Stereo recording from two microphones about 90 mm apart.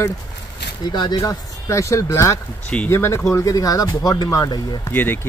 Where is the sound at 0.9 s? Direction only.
55° left (ahead or behind).